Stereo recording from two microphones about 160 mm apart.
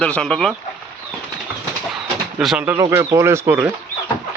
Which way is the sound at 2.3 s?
5° right (ahead or behind).